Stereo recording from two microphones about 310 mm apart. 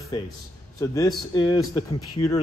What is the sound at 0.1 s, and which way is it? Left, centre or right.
A man's voice, centre.